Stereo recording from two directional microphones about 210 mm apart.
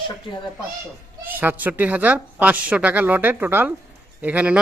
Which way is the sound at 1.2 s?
10° right (ahead or behind).